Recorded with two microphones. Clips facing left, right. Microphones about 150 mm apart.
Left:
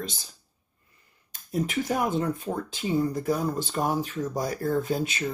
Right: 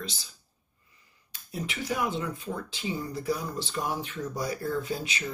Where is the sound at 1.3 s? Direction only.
45° left (ahead or behind).